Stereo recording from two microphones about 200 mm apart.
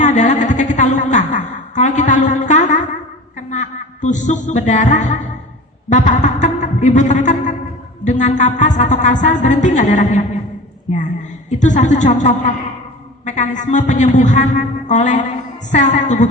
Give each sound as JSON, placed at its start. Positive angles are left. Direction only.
{"t": 0.0, "sound": "a sound", "side_deg": 35}
{"t": 1.3, "sound": "music", "side_deg": 40}
{"t": 3.3, "sound": "speech", "side_deg": 35}
{"t": 11.4, "sound": "speech", "side_deg": 40}